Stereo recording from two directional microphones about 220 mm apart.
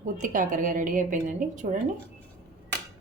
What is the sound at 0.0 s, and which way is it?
A woman's voice, 35° right (ahead or behind).